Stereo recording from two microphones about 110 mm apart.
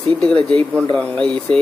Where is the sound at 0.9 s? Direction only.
10° left (ahead or behind).